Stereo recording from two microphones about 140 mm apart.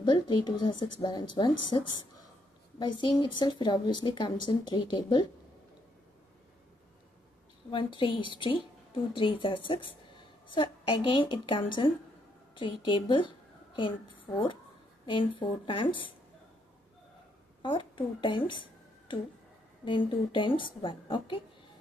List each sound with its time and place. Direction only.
0.0 s a woman's voice: 30° left (ahead or behind)
7.7 s a woman's voice: 35° left (ahead or behind)
17.6 s a woman's voice: 35° left (ahead or behind)